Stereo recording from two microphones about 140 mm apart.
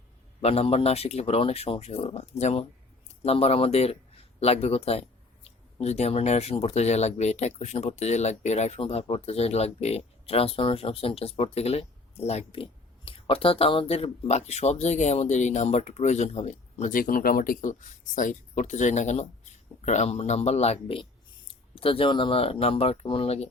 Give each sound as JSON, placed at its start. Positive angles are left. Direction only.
{"t": 0.4, "sound": "speech", "side_deg": 45}